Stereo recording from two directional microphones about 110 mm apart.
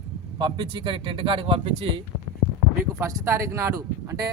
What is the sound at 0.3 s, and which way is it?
Speech, 45° right (ahead or behind).